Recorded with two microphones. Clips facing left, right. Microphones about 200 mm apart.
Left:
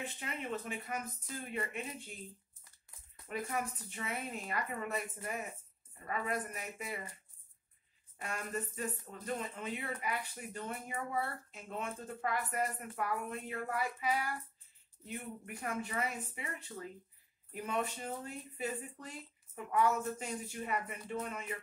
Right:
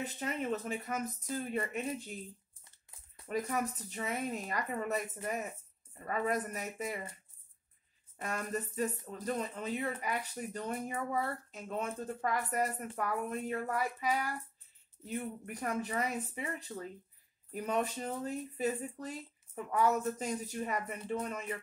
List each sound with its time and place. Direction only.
0.0 s speech: 40° right (ahead or behind)
3.3 s speech: 40° right (ahead or behind)
8.2 s speech: 40° right (ahead or behind)